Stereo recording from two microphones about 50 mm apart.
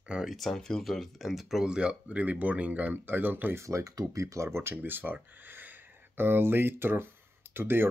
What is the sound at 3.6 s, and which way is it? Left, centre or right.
Speech, right.